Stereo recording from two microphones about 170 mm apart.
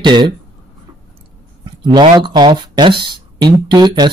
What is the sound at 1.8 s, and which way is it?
Speech, 30° right (ahead or behind).